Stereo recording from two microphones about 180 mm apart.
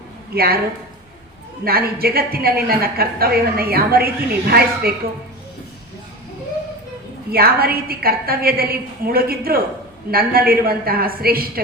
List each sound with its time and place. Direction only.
0.3 s a woman's voice: 60° right (ahead or behind)
1.6 s a woman's voice: 55° right (ahead or behind)
7.3 s a woman's voice: 55° right (ahead or behind)